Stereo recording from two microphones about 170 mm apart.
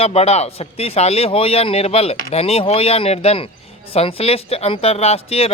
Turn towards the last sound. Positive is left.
turn(degrees=35)  # may be behind; listen again after turning